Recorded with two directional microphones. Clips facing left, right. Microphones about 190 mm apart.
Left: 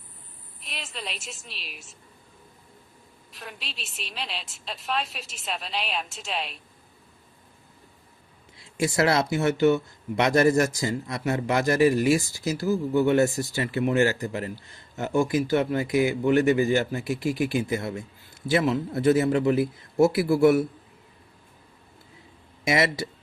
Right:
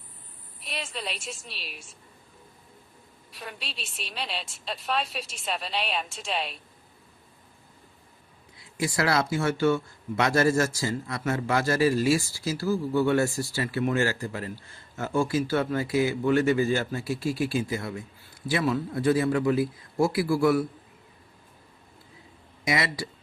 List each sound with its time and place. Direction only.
0.6 s a woman's voice: centre (ahead or behind)
3.3 s a woman's voice: centre (ahead or behind)
8.8 s speech: 25° left (ahead or behind)
22.6 s speech: 25° left (ahead or behind)